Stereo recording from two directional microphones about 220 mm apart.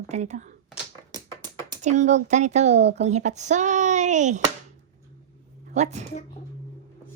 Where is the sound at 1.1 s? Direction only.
20° right (ahead or behind).